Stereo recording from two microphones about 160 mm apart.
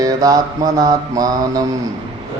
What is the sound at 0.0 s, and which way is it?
Speech, 25° right (ahead or behind).